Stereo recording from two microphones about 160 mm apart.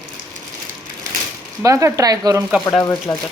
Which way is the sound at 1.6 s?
20° right (ahead or behind).